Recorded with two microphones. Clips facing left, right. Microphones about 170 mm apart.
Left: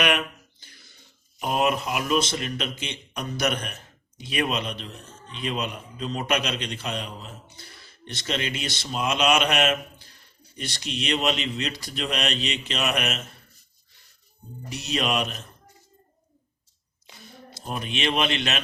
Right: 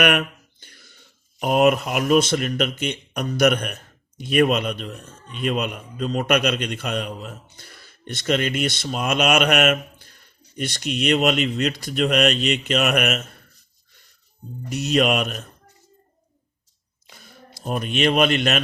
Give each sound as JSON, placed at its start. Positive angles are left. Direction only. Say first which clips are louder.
{"t": 0.0, "sound": "a sound", "louder": "right 4 dB", "side_deg": -55}
{"t": 1.4, "sound": "speech", "louder": "right 7 dB", "side_deg": -55}
{"t": 14.7, "sound": "speech", "louder": "right 7 dB", "side_deg": -50}
{"t": 17.7, "sound": "speech", "louder": "right 7 dB", "side_deg": -45}